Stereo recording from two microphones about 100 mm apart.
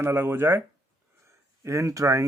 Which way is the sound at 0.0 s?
20° right (ahead or behind).